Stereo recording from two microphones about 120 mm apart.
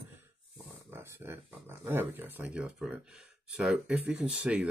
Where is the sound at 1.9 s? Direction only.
15° right (ahead or behind).